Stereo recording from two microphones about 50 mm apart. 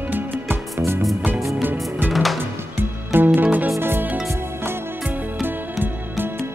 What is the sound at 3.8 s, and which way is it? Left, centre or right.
Music, right.